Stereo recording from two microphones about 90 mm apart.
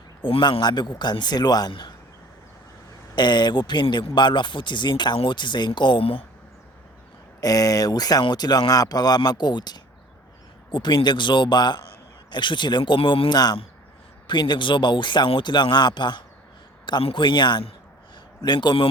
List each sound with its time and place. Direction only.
0.2 s a man's voice: 70° left (ahead or behind)
0.6 s speech: 55° left (ahead or behind)
3.2 s speech: 55° left (ahead or behind); by 6.2 s 90° left
7.4 s speech: 45° left (ahead or behind); by 13.3 s 90° left
13.3 s speech: 50° left (ahead or behind)
16.8 s speech: 75° left (ahead or behind)
18.4 s speech: 55° left (ahead or behind)